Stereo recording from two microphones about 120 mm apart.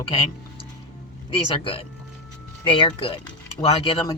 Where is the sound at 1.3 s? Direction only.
45° left (ahead or behind).